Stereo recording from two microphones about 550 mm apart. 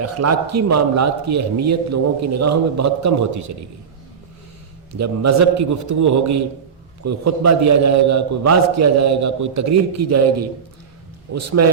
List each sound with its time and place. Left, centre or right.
0.0 s a man's voice: right
4.9 s a man's voice: right